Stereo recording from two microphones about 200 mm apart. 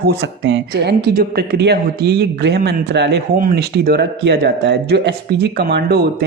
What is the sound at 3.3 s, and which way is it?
Speech, 45° right (ahead or behind).